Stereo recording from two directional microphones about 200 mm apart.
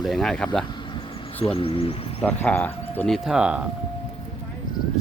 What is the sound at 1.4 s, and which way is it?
Speech, 30° left (ahead or behind).